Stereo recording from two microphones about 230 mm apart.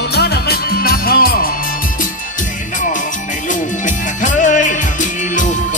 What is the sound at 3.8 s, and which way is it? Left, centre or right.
Music, left.